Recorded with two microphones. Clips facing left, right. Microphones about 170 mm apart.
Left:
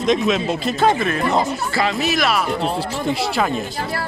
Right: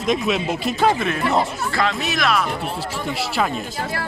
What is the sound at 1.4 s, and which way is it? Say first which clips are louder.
Speech: left 1 dB; 5° left (ahead or behind).